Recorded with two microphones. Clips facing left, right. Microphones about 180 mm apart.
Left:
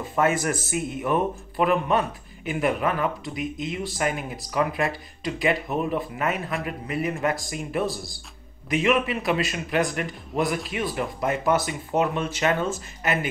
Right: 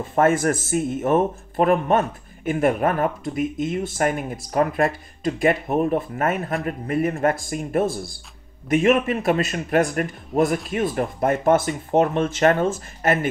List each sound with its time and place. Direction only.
0.1 s a man's voice: 50° right (ahead or behind)